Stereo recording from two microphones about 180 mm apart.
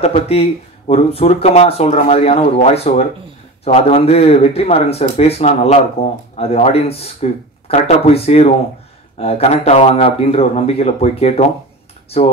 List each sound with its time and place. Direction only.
0.0 s speech: 35° left (ahead or behind)